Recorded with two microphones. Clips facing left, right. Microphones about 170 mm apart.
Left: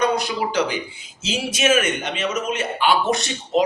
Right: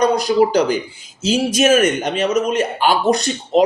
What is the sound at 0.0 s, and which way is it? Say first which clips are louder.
A man's voice: right 7 dB; 40° right (ahead or behind).